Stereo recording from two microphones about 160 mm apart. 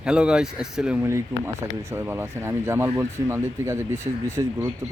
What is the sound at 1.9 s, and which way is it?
Speech, 15° right (ahead or behind).